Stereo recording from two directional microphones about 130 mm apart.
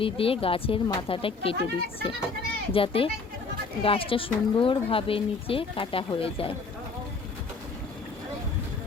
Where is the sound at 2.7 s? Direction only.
45° left (ahead or behind).